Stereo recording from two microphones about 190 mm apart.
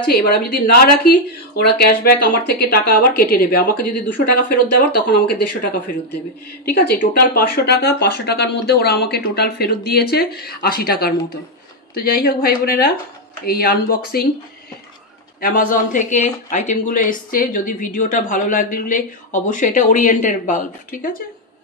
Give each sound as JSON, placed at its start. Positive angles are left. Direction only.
{"t": 0.0, "sound": "speech", "side_deg": 50}
{"t": 15.4, "sound": "speech", "side_deg": 45}